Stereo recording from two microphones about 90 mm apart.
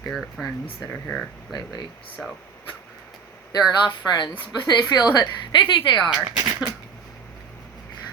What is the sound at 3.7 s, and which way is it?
A woman's voice, 50° left (ahead or behind).